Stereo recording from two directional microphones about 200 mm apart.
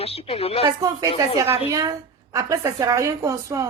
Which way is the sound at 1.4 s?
15° right (ahead or behind).